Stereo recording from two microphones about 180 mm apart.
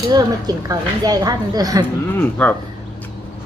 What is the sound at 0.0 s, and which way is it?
A woman's voice, 20° right (ahead or behind).